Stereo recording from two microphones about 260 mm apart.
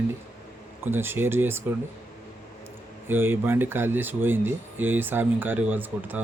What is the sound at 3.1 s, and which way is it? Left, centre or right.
Speech, centre.